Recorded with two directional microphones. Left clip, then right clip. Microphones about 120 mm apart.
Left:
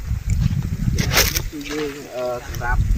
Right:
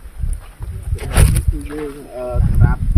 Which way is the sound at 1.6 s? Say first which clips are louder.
Even; 15° left (ahead or behind).